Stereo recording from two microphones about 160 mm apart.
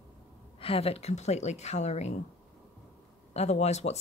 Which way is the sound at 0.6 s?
35° left (ahead or behind).